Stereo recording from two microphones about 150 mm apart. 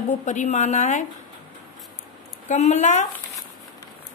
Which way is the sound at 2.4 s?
50° left (ahead or behind).